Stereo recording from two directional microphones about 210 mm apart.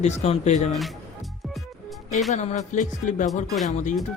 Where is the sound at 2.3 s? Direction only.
35° left (ahead or behind).